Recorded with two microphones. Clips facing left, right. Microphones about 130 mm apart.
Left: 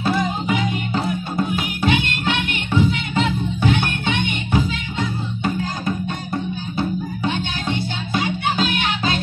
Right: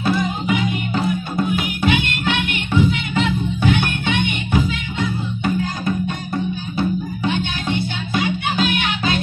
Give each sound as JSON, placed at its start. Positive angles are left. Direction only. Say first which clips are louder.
{"t": 0.0, "sound": "music", "louder": "right 1 dB", "side_deg": 35}
{"t": 7.2, "sound": "music", "louder": "right 2 dB", "side_deg": 35}